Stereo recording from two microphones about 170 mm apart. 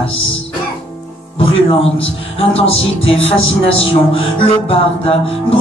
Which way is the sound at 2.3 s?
35° left (ahead or behind).